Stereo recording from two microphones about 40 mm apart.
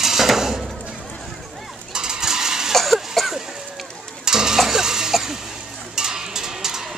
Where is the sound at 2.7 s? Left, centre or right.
Centre.